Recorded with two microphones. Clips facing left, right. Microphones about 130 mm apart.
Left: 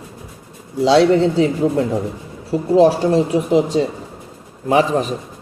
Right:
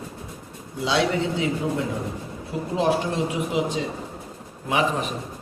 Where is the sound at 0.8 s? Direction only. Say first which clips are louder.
Left 10 dB; 40° left (ahead or behind).